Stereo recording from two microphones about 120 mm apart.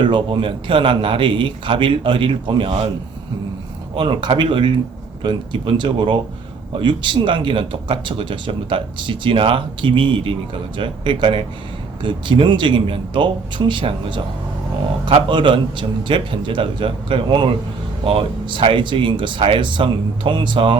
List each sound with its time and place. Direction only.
0.0 s speech: 45° right (ahead or behind)
3.9 s speech: 40° right (ahead or behind)